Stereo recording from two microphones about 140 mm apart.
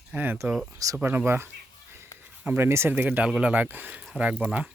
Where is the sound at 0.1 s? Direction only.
15° right (ahead or behind).